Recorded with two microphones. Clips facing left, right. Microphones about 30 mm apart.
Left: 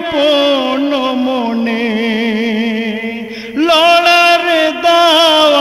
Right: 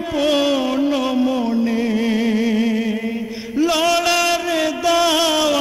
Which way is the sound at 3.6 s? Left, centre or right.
Left.